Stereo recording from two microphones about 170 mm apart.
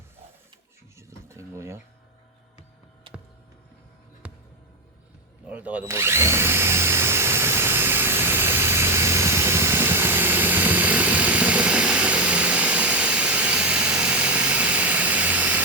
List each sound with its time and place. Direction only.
0.9 s a sound: 15° right (ahead or behind)
4.2 s music: 10° right (ahead or behind)
5.5 s drill: 10° right (ahead or behind)